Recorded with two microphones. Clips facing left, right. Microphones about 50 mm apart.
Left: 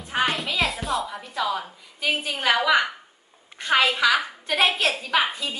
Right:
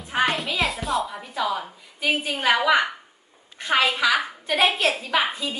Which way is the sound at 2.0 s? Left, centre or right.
Centre.